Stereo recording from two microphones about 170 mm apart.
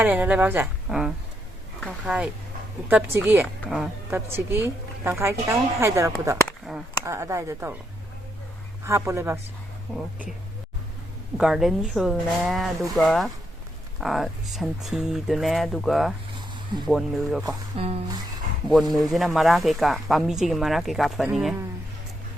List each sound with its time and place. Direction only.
0.0 s speech: 10° right (ahead or behind)
3.6 s speech: centre (ahead or behind)
4.1 s speech: 15° right (ahead or behind)
6.7 s cap gun: 5° right (ahead or behind)
7.0 s speech: 15° right (ahead or behind)
8.8 s speech: 15° right (ahead or behind)
11.3 s speech: 5° right (ahead or behind)
17.7 s music: 35° right (ahead or behind)
18.7 s speech: centre (ahead or behind)